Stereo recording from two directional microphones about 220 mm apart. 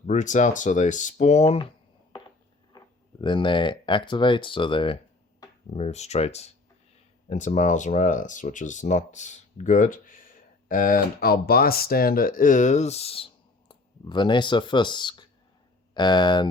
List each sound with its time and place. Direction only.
0.0 s speech: 35° left (ahead or behind)
2.7 s speech: 20° left (ahead or behind)